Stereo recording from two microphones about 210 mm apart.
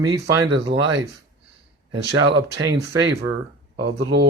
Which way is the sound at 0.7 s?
60° right (ahead or behind).